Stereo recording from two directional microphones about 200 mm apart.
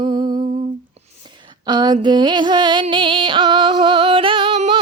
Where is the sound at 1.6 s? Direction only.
20° right (ahead or behind).